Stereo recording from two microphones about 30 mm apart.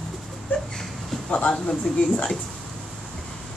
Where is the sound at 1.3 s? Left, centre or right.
Left.